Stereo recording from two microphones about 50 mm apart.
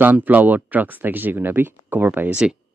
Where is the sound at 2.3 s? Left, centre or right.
Centre.